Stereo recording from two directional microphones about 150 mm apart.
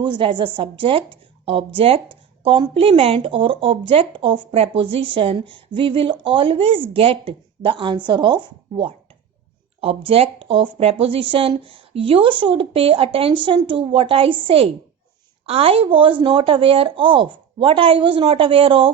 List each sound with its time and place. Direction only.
0.0 s speech: 35° right (ahead or behind)
10.1 s speech: 40° right (ahead or behind)